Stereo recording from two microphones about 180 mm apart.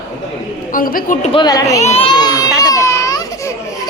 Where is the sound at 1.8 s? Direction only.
35° left (ahead or behind).